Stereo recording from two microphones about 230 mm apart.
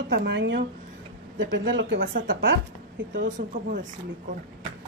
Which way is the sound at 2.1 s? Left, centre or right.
Right.